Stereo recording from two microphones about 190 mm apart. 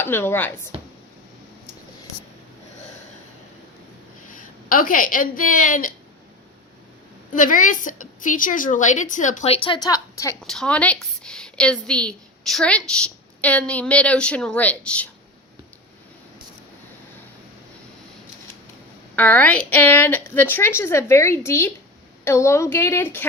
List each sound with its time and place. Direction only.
0.0 s a woman's voice: 10° left (ahead or behind)
4.3 s a woman's voice: 45° left (ahead or behind)
7.3 s a woman's voice: 45° left (ahead or behind); by 10.3 s 20° left (ahead or behind)
10.4 s a woman's voice: 5° left (ahead or behind)
19.1 s a woman's voice: 10° left (ahead or behind)